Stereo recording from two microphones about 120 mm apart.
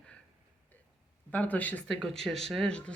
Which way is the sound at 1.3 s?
15° left (ahead or behind).